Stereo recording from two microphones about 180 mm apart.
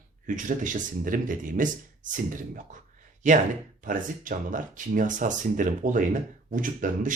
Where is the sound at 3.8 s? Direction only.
50° right (ahead or behind).